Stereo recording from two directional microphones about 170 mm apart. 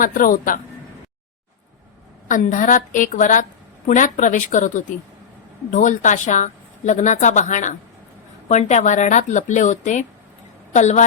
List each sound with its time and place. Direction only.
0.0 s a woman's voice: 55° left (ahead or behind)
2.2 s a woman's voice: 50° left (ahead or behind)